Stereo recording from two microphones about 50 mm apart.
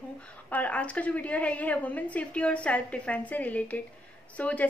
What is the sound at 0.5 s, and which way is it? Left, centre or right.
A woman's voice, left.